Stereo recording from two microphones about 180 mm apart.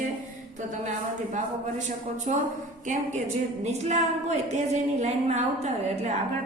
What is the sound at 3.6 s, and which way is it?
A woman's voice, 40° right (ahead or behind).